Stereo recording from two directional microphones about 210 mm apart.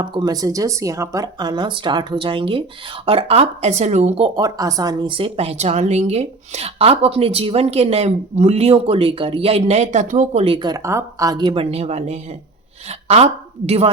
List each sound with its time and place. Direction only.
0.0 s speech: 20° right (ahead or behind)
4.4 s a woman's voice: 20° right (ahead or behind)